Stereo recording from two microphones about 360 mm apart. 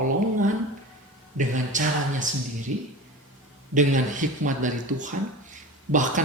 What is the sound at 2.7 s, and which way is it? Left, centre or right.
Speech, right.